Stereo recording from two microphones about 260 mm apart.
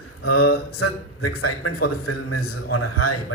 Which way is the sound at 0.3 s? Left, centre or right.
Left.